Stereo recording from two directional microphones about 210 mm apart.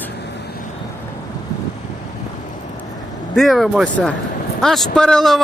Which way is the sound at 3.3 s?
Centre (ahead or behind).